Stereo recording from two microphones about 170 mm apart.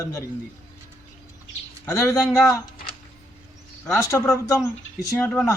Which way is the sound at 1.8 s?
20° left (ahead or behind).